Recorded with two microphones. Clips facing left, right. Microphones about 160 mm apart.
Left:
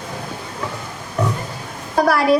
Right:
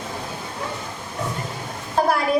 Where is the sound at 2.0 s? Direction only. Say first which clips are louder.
Left 4 dB; 80° left.